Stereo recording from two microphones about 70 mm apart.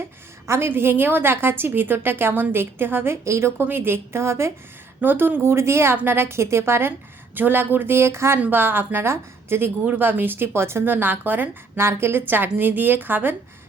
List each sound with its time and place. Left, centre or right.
0.0 s a sound: right
0.7 s a woman's voice: right
3.6 s a woman's voice: right
4.9 s a woman's voice: right
8.4 s a woman's voice: right
11.8 s speech: right